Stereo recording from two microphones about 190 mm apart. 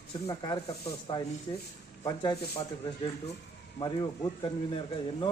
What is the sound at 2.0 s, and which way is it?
Speech, 20° left (ahead or behind).